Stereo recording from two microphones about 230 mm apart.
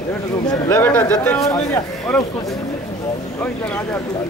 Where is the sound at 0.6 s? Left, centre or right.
Centre.